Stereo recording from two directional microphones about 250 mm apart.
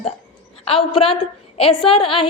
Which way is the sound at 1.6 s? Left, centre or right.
Left.